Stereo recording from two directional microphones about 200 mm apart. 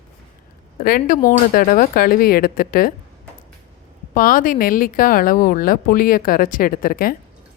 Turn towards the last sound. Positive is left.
turn(degrees=45)  # may be behind; listen again after turning